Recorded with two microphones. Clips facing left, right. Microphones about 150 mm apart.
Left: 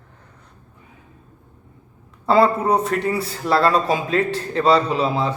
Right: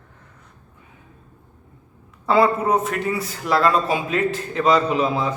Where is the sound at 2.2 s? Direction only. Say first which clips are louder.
Left 1 dB; 30° left (ahead or behind).